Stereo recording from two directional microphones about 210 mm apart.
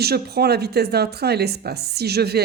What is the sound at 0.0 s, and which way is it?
Speech, 50° right (ahead or behind).